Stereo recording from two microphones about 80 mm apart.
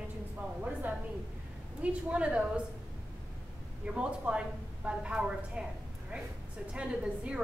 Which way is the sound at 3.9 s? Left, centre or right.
Centre.